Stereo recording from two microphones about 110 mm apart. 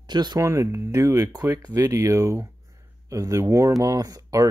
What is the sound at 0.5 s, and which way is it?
Speech, 30° right (ahead or behind).